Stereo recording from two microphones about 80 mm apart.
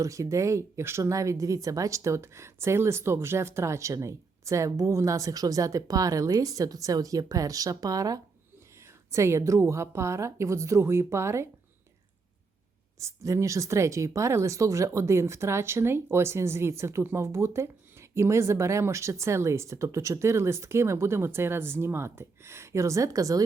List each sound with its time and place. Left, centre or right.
0.0 s speech: right
9.1 s speech: right
13.0 s speech: right